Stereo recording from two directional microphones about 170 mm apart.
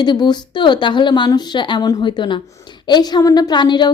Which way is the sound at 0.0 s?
25° left (ahead or behind).